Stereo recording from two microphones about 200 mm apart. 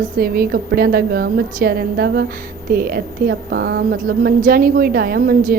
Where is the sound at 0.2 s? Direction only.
50° right (ahead or behind).